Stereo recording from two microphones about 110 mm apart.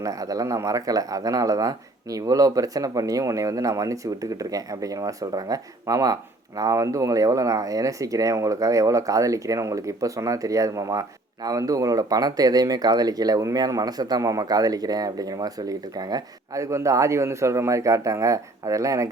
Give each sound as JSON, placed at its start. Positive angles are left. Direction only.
{"t": 0.0, "sound": "speech", "side_deg": -30}